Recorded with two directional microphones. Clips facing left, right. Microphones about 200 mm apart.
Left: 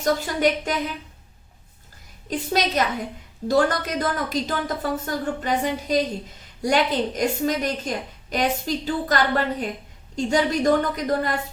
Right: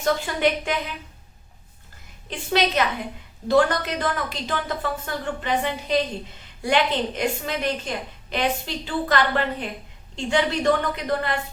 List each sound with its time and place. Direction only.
0.0 s a woman's voice: 40° left (ahead or behind)
2.3 s a woman's voice: 40° left (ahead or behind)